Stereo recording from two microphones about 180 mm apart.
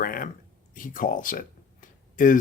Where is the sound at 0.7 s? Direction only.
50° left (ahead or behind).